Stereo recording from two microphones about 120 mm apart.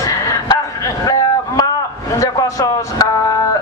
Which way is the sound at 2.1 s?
25° left (ahead or behind).